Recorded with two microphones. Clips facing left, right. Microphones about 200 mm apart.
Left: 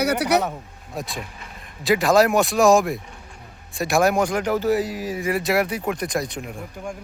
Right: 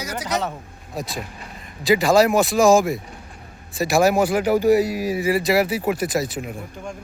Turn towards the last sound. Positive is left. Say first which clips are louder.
# right 3 dB
turn(degrees=-5)  # may be behind; listen again after turning